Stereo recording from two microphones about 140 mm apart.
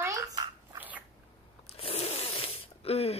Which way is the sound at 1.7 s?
45° left (ahead or behind).